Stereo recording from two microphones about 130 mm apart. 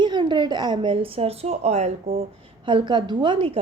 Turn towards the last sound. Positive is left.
turn(degrees=-40)  # may be behind; listen again after turning